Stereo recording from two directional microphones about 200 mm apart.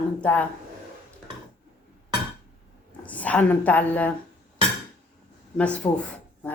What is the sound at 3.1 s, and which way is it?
A woman's voice, 5° left (ahead or behind).